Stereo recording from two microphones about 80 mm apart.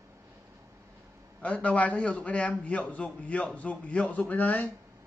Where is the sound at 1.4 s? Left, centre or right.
Centre.